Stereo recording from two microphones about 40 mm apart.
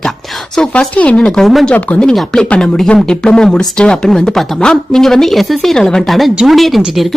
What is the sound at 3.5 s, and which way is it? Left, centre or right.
Speech, left.